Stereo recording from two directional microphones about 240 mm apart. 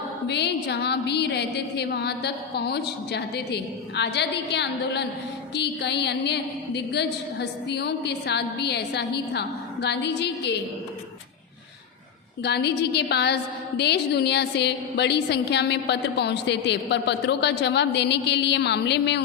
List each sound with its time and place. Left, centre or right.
0.3 s a woman's voice: left
12.4 s a woman's voice: left